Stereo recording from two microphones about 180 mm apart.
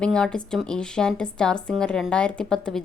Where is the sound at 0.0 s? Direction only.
5° left (ahead or behind).